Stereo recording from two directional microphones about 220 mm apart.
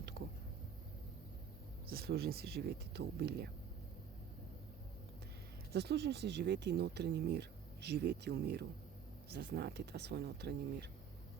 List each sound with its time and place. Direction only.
1.9 s speech: 45° right (ahead or behind)
5.7 s speech: 45° right (ahead or behind)